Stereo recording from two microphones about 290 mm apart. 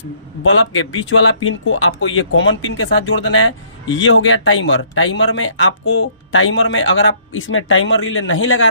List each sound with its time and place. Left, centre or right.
0.4 s speech: left